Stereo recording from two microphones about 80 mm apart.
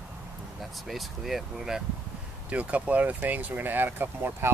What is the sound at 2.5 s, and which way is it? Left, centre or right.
Speech, centre.